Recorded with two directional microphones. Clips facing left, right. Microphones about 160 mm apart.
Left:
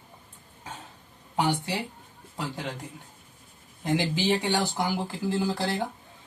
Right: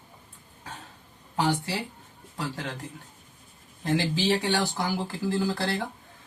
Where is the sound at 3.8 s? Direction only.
15° left (ahead or behind).